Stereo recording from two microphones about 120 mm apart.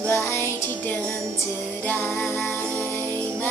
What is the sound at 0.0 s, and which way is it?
Music, 15° left (ahead or behind).